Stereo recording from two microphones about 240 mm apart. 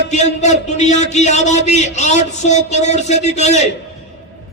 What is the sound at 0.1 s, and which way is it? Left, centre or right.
A man's voice, left.